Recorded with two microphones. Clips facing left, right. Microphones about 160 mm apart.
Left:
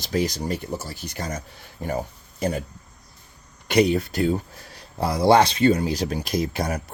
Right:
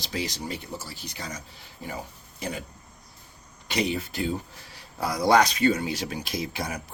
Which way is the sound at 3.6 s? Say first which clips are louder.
Left 8 dB; 60° left (ahead or behind).